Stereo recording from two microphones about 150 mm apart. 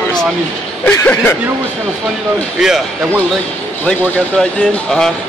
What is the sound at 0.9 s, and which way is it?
Speech, 10° left (ahead or behind).